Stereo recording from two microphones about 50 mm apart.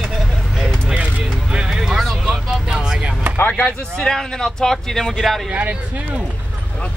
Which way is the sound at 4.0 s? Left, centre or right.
Centre.